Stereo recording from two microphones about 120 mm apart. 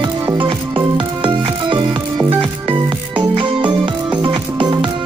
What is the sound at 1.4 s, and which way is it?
Music, 40° right (ahead or behind).